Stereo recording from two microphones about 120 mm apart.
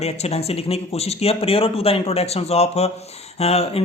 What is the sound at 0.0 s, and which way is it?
Speech, 60° left (ahead or behind).